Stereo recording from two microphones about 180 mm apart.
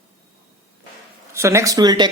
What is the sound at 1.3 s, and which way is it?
Speech, 15° right (ahead or behind).